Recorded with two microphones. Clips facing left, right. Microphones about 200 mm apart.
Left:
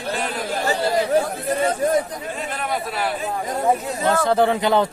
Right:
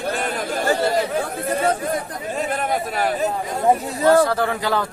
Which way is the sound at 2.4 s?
45° right (ahead or behind).